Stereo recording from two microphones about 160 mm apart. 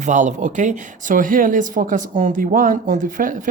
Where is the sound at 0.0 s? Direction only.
50° right (ahead or behind).